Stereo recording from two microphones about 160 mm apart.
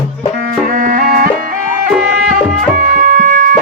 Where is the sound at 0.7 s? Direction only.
60° right (ahead or behind).